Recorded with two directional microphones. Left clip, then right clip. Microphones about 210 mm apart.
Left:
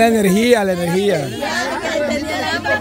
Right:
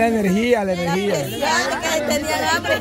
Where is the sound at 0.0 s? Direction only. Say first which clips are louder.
Left 5 dB; 30° left (ahead or behind).